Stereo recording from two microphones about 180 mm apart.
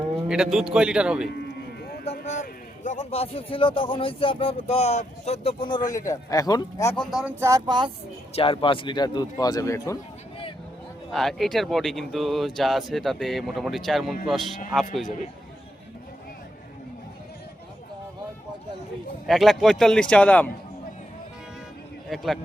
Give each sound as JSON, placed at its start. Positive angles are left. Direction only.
{"t": 0.5, "sound": "speech", "side_deg": -5}
{"t": 1.3, "sound": "a sound", "side_deg": 65}
{"t": 2.2, "sound": "a man's voice", "side_deg": 40}
{"t": 5.9, "sound": "speech", "side_deg": 20}
{"t": 6.9, "sound": "speech", "side_deg": 0}
{"t": 7.3, "sound": "speech", "side_deg": -15}
{"t": 8.3, "sound": "speech", "side_deg": 30}
{"t": 11.1, "sound": "speech", "side_deg": 0}
{"t": 19.3, "sound": "speech", "side_deg": 0}
{"t": 22.1, "sound": "speech", "side_deg": 0}